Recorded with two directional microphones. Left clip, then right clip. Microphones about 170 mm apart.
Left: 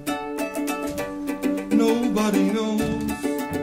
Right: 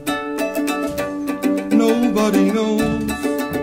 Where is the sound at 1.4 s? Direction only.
10° right (ahead or behind).